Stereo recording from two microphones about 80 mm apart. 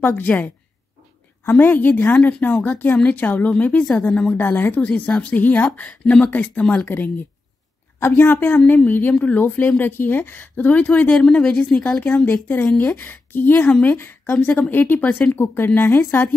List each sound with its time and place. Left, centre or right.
0.0 s a woman's voice: left
1.5 s a woman's voice: left
4.4 s a woman's voice: left
6.6 s speech: centre
6.9 s a woman's voice: left
12.3 s a woman's voice: left
13.7 s a woman's voice: centre
13.9 s a woman's voice: left